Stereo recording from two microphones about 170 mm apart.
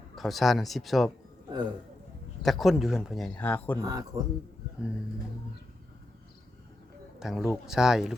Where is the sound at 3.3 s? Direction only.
10° left (ahead or behind).